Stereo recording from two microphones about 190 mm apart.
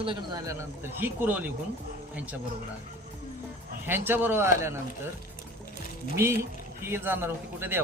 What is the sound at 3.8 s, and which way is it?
Speech, 10° right (ahead or behind).